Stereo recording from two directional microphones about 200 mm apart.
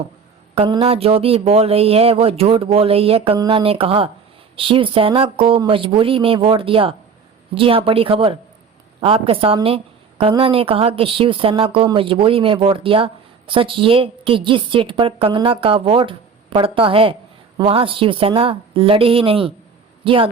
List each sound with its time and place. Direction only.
0.5 s speech: 25° right (ahead or behind)